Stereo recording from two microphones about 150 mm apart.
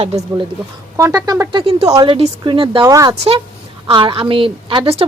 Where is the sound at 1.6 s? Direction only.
40° right (ahead or behind).